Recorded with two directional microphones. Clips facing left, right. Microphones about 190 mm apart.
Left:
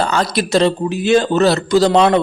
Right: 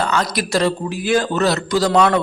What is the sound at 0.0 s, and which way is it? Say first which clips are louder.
Speech: left 3 dB; 30° left (ahead or behind).